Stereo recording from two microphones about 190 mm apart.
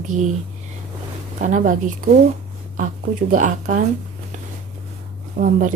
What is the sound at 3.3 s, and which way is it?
Speech, 40° right (ahead or behind).